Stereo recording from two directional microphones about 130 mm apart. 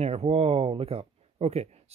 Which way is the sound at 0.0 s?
55° right (ahead or behind).